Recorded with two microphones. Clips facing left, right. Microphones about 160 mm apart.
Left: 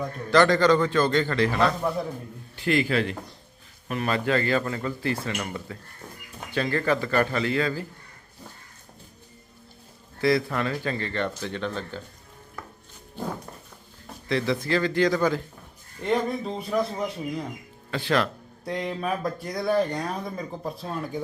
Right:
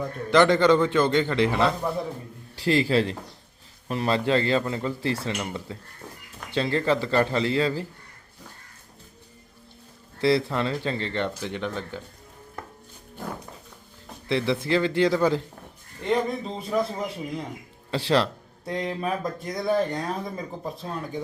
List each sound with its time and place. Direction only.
0.3 s speech: 20° right (ahead or behind)
2.6 s a man's voice: 30° right (ahead or behind)
10.2 s speech: 30° right (ahead or behind)
14.3 s speech: 25° right (ahead or behind)
16.0 s a man's voice: 5° left (ahead or behind)
17.9 s speech: 30° right (ahead or behind)
18.6 s a man's voice: centre (ahead or behind)